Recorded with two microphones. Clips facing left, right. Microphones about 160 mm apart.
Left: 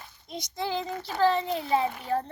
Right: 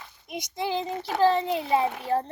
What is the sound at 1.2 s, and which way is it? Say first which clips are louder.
Speech: right 2 dB; 20° right (ahead or behind).